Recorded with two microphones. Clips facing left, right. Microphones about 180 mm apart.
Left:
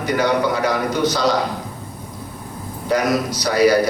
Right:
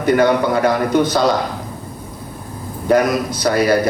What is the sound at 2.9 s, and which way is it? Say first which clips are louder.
A man's voice: right 4 dB; 50° right (ahead or behind).